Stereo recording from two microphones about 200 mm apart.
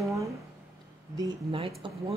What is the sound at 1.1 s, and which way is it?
Speech, 25° right (ahead or behind).